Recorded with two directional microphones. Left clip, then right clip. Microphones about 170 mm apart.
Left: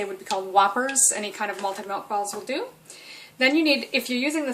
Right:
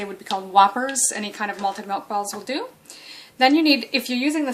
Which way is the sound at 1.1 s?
40° right (ahead or behind).